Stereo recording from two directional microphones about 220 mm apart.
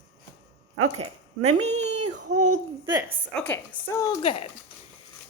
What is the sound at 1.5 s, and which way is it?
Speech, 30° right (ahead or behind).